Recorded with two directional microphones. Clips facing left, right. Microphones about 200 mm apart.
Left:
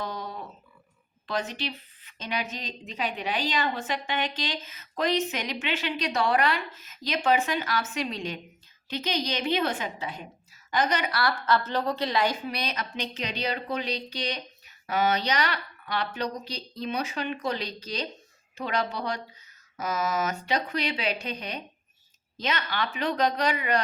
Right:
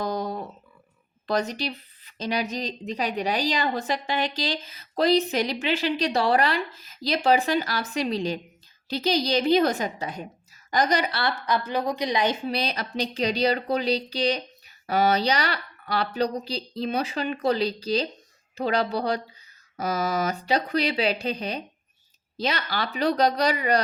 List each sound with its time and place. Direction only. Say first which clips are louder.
0.0 s a sound: right 7 dB; 40° right (ahead or behind)
1.3 s a woman's voice: right 5 dB; 40° right (ahead or behind)
11.2 s a woman's voice: even; 20° right (ahead or behind)
12.5 s a woman's voice: right 4 dB; 35° right (ahead or behind)